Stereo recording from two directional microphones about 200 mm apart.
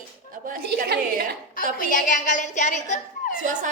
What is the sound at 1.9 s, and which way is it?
A woman's voice, 40° left (ahead or behind).